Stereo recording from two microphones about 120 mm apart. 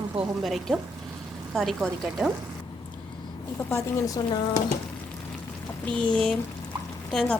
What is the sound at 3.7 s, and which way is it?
Speech, 30° left (ahead or behind).